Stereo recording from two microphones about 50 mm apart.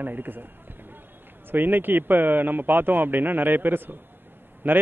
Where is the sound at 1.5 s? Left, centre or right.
Right.